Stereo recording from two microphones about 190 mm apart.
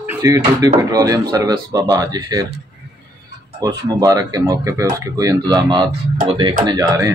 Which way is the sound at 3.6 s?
20° right (ahead or behind).